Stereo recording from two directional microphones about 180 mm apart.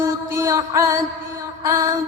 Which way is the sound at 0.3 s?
20° right (ahead or behind).